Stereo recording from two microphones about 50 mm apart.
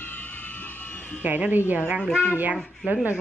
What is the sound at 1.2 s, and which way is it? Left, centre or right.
A woman's voice, right.